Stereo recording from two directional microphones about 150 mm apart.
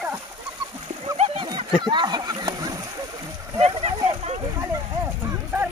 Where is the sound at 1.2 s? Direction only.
35° right (ahead or behind).